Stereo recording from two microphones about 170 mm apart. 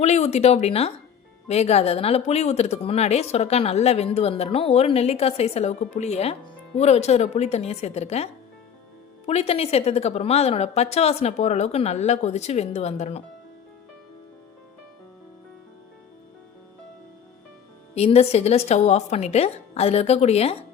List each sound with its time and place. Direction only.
0.0 s a woman's voice: 40° left (ahead or behind)
17.9 s a woman's voice: 40° left (ahead or behind)